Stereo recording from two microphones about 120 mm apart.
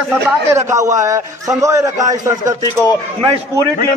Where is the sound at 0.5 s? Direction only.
25° right (ahead or behind).